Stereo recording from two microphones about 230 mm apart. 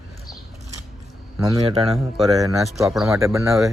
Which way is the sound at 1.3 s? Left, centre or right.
Centre.